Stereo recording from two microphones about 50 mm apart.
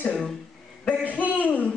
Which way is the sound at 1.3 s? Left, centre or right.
Left.